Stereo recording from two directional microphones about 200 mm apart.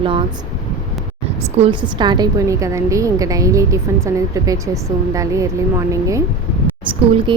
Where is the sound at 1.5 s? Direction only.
25° right (ahead or behind).